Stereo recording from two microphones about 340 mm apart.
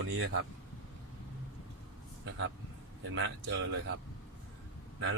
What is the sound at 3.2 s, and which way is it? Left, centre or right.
Speech, right.